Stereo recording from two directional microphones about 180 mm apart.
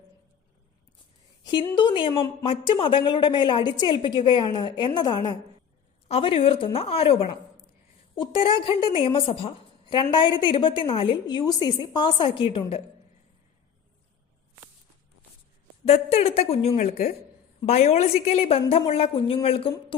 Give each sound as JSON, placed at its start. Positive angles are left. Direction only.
{"t": 1.5, "sound": "a woman's voice", "side_deg": 25}
{"t": 15.9, "sound": "a woman's voice", "side_deg": 35}